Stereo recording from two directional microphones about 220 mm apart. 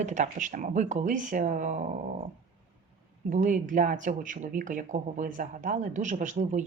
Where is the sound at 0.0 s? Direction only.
35° right (ahead or behind).